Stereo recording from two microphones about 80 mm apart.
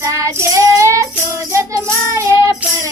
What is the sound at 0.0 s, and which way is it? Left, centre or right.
Child singing, right.